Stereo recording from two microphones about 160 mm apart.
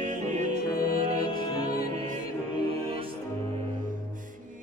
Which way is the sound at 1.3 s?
70° left (ahead or behind).